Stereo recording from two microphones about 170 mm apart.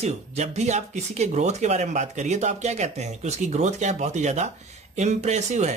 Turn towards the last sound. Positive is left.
turn(degrees=-45)  # may be behind; listen again after turning